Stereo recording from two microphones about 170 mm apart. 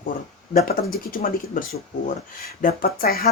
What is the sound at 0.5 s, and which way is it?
A woman's voice, 60° left (ahead or behind).